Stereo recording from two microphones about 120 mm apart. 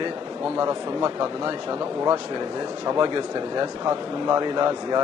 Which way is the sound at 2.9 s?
40° right (ahead or behind).